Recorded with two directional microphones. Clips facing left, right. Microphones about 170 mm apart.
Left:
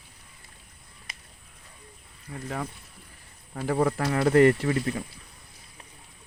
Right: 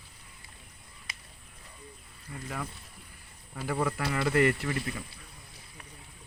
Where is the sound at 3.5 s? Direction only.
40° left (ahead or behind).